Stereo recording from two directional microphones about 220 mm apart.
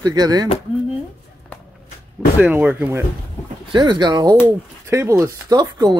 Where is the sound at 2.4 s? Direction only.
5° right (ahead or behind).